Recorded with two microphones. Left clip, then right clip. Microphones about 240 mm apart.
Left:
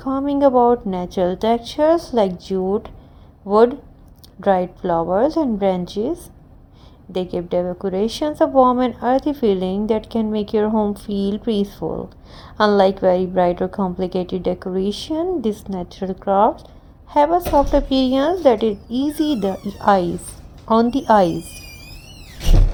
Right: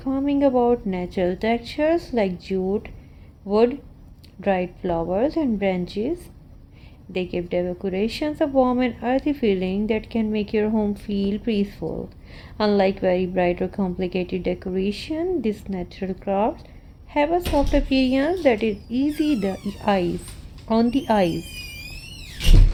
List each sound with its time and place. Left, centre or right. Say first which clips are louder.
0.0 s a woman's voice: left 4 dB; left
20.7 s a woman's voice: left 6 dB; left